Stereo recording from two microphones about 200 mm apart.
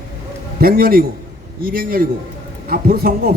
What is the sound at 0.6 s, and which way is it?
Speech, 50° right (ahead or behind).